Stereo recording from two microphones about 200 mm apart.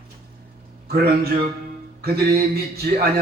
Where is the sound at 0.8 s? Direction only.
50° right (ahead or behind).